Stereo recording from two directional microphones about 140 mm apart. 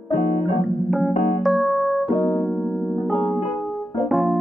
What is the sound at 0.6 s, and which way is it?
Keyboard, centre (ahead or behind).